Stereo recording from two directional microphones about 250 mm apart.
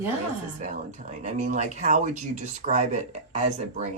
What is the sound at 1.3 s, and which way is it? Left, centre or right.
Speech, right.